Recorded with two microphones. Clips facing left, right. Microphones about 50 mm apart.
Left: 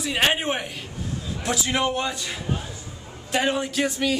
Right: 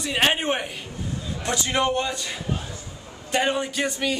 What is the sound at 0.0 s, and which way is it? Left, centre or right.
A man's voice, centre.